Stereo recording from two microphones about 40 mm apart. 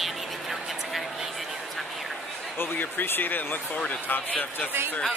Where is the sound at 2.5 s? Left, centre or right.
Left.